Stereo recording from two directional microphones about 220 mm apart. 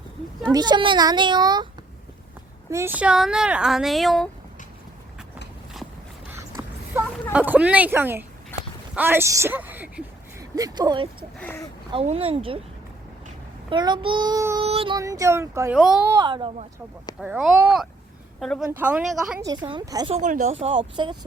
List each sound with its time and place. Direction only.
0.5 s a child's voice: 20° right (ahead or behind)
2.6 s speech: 10° right (ahead or behind)
6.3 s a sound: 10° right (ahead or behind)
7.3 s a woman's voice: 5° right (ahead or behind)
10.5 s speech: 15° right (ahead or behind)
11.3 s speech: 10° left (ahead or behind)
11.9 s a child's voice: 25° right (ahead or behind)
13.7 s a child's voice: 20° right (ahead or behind); by 16.1 s centre (ahead or behind)
16.1 s a child's voice: 20° right (ahead or behind)
17.2 s speech: 5° right (ahead or behind)
19.4 s speech: 20° right (ahead or behind)
20.1 s a child's voice: 35° right (ahead or behind)